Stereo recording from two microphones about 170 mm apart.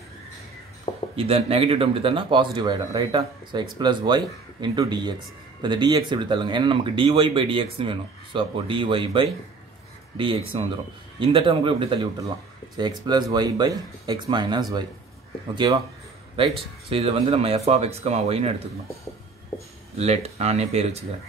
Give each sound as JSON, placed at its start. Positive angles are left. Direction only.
{"t": 1.1, "sound": "speech", "side_deg": -35}
{"t": 16.9, "sound": "speech", "side_deg": -35}
{"t": 20.0, "sound": "speech", "side_deg": -40}